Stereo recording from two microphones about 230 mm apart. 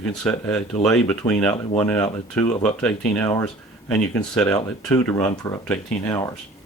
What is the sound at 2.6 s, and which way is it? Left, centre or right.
Speech, centre.